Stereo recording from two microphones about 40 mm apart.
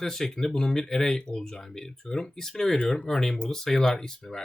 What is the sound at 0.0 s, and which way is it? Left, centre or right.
Speech, centre.